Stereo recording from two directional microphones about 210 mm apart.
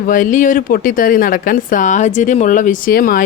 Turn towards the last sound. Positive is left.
turn(degrees=45)  # may be behind; listen again after turning